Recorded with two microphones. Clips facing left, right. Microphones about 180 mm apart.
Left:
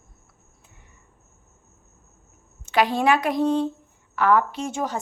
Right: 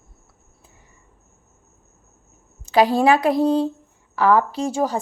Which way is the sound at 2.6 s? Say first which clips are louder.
Right 4 dB; 35° right (ahead or behind).